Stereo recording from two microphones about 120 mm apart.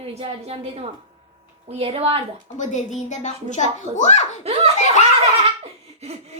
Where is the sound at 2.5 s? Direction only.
90° left.